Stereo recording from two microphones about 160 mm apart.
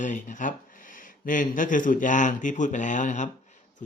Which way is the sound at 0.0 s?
50° left (ahead or behind).